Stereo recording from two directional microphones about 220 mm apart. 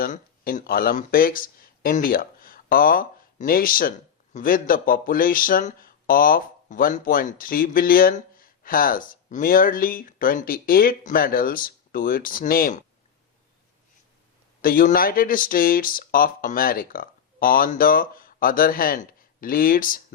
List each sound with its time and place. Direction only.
0.0 s speech: 40° left (ahead or behind)
14.6 s speech: 40° left (ahead or behind)